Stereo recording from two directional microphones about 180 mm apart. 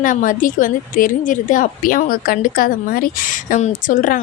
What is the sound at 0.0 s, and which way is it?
Speech, 45° left (ahead or behind).